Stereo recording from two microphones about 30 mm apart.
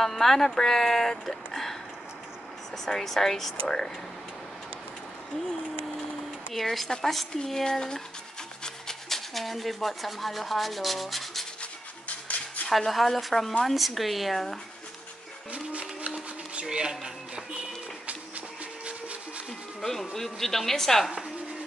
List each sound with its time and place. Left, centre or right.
0.0 s speech: centre
2.8 s speech: centre
6.5 s speech: centre
8.6 s rub: centre
9.3 s rub: centre
12.1 s a sound: left
12.7 s speech: centre
13.7 s rub: centre
15.5 s a sound: right
16.6 s speech: right
19.8 s speech: centre